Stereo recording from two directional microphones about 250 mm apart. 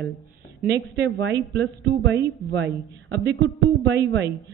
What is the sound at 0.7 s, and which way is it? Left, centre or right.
Speech, right.